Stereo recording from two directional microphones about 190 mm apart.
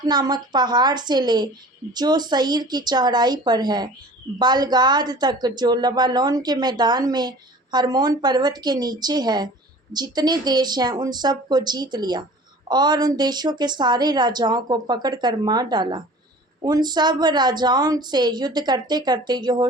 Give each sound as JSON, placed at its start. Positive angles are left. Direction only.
{"t": 0.0, "sound": "a woman's voice", "side_deg": -20}